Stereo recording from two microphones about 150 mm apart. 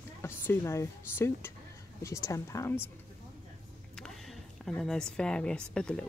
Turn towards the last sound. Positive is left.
turn(degrees=5)  # may be behind; listen again after turning